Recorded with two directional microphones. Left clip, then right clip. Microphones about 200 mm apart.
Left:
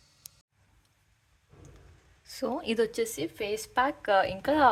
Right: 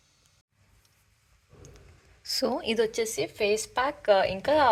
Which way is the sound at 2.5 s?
15° left (ahead or behind).